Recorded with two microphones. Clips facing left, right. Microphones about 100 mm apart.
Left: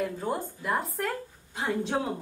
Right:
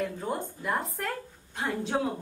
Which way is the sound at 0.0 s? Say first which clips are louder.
Left 1 dB; centre (ahead or behind).